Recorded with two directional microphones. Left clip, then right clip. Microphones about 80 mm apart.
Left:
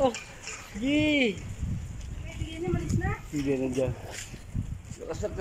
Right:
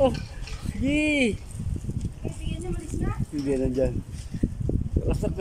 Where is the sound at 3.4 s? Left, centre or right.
Centre.